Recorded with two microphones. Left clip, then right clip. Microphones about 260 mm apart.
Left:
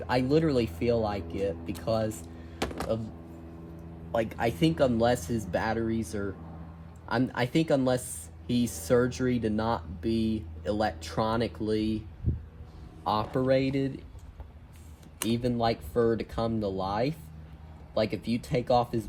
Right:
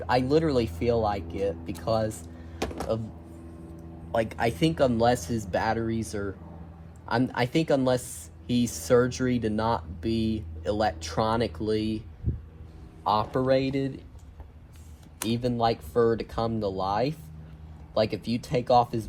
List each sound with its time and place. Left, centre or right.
0.1 s speech: centre
4.1 s speech: right
13.1 s speech: centre
15.3 s speech: centre